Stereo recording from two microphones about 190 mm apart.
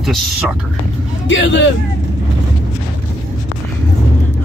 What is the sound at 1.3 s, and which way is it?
Speech, 75° left (ahead or behind).